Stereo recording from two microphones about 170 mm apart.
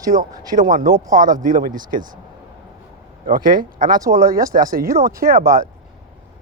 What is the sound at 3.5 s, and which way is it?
Speech, 55° right (ahead or behind).